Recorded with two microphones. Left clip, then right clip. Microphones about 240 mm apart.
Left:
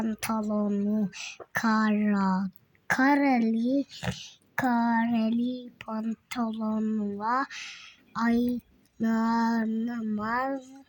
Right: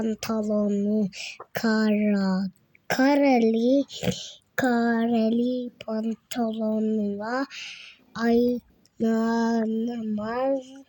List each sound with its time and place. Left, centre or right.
0.0 s speech: centre
3.1 s a woman's voice: left
3.8 s speech: centre